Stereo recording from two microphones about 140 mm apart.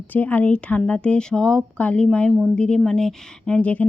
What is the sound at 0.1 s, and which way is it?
Speech, 10° left (ahead or behind).